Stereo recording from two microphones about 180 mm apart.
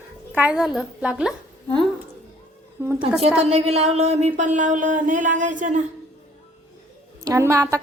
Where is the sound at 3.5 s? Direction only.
35° right (ahead or behind).